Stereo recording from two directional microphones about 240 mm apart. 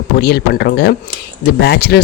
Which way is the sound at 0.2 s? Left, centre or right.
Left.